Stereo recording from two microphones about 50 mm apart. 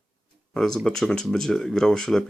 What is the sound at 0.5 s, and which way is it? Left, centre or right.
Speech, centre.